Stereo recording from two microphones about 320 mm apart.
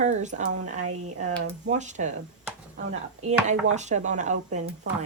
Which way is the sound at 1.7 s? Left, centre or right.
Right.